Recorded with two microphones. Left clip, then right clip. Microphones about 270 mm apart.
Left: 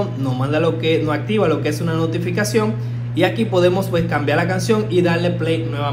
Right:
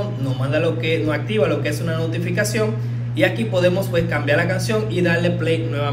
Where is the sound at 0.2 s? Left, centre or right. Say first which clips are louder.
Left 1 dB; left.